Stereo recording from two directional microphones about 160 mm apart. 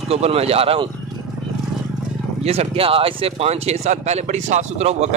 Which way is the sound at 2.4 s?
40° right (ahead or behind).